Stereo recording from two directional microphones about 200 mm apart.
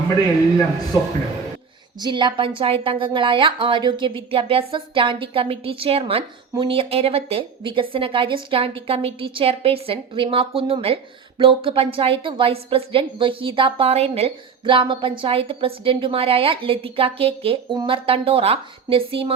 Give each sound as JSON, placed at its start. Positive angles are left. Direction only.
{"t": 2.0, "sound": "a woman's voice", "side_deg": -25}